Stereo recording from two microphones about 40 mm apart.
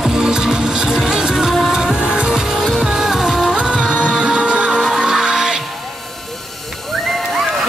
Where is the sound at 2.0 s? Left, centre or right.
Right.